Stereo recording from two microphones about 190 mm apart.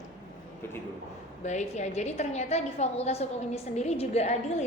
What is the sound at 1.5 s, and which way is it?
A woman's voice, 40° left (ahead or behind).